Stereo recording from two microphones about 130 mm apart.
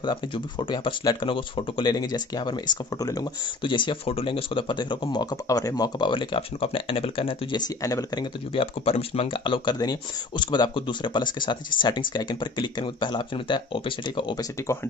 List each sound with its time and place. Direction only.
0.0 s speech: 35° left (ahead or behind)
8.8 s speech: 50° left (ahead or behind)